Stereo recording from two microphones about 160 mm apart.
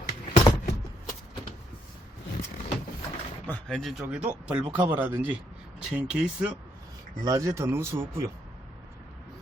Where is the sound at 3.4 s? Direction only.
5° left (ahead or behind).